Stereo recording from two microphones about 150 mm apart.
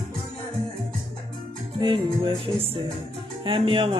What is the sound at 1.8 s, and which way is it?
Music, 30° right (ahead or behind).